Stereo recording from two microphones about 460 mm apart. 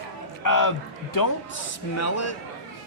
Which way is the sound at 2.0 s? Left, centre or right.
Left.